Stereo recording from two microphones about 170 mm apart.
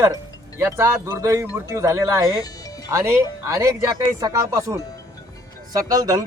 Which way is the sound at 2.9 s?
20° right (ahead or behind).